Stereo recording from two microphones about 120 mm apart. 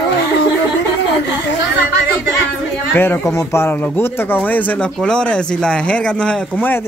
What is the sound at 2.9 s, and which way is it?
Speech, 15° left (ahead or behind).